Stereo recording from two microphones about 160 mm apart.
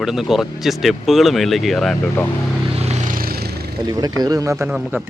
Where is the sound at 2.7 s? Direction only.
40° right (ahead or behind).